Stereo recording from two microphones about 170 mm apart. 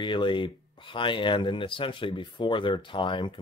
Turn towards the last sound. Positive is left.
turn(degrees=30)  # may be behind; listen again after turning